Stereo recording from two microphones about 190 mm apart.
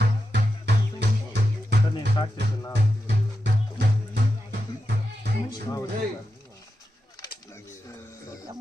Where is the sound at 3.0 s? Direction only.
65° right (ahead or behind).